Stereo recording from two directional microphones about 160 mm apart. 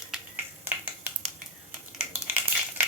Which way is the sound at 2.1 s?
15° right (ahead or behind).